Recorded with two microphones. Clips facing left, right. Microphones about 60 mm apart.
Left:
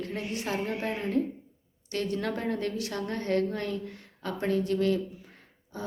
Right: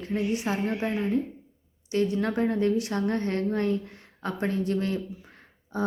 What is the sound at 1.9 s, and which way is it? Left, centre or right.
A woman's voice, centre.